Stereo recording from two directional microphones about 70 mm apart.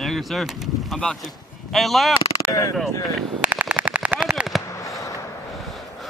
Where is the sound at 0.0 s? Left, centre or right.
Centre.